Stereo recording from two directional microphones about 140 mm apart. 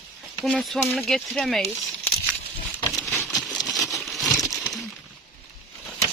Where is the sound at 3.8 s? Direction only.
25° left (ahead or behind).